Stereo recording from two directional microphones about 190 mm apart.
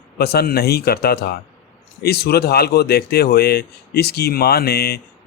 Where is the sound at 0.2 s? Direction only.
55° left (ahead or behind).